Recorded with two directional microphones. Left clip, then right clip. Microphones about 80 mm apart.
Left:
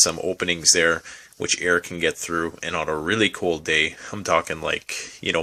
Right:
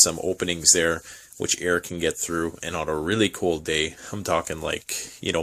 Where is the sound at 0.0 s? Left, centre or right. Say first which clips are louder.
Left 1 dB; right.